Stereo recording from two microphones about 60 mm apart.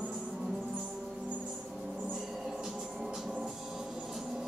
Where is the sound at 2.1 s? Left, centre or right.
Centre.